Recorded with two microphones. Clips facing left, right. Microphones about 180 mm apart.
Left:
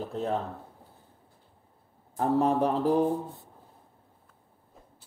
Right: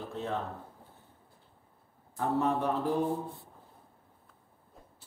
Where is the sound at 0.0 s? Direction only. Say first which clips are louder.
Left 5 dB; 40° left (ahead or behind).